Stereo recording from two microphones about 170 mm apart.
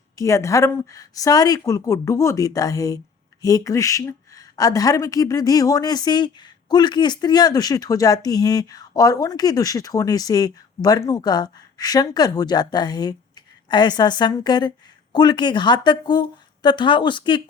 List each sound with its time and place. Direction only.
0.2 s speech: 20° left (ahead or behind)